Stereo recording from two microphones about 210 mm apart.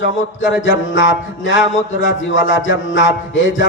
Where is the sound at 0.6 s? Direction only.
60° left (ahead or behind).